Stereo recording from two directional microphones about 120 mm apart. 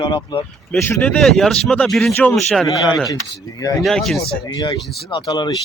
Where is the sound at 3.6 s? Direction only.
30° left (ahead or behind).